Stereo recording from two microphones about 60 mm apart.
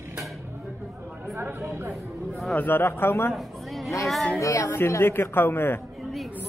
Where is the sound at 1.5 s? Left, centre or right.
Right.